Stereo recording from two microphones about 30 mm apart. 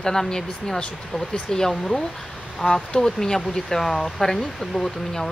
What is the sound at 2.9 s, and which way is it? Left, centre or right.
Speech, left.